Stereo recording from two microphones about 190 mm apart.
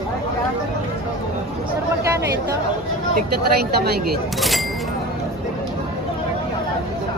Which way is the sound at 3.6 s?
55° right (ahead or behind).